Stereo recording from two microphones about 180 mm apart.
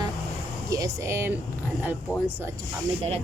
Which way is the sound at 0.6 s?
20° right (ahead or behind).